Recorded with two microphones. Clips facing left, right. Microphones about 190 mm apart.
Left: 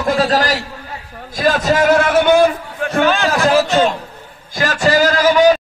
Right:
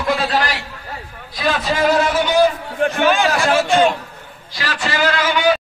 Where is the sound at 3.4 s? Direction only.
40° left (ahead or behind).